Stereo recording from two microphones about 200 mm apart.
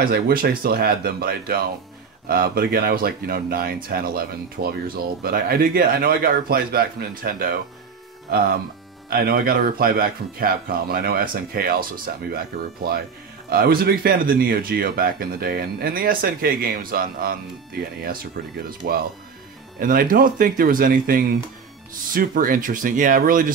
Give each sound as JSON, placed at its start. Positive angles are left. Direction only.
{"t": 0.0, "sound": "speech", "side_deg": -45}
{"t": 9.1, "sound": "speech", "side_deg": -45}
{"t": 13.5, "sound": "speech", "side_deg": -50}